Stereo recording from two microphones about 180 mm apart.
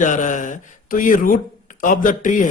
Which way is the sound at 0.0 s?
45° left (ahead or behind).